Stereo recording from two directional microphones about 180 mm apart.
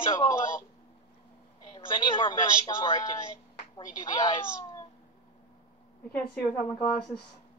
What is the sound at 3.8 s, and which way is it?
Speech, 25° left (ahead or behind).